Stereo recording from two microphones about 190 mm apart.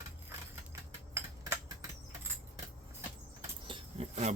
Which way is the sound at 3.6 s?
30° right (ahead or behind).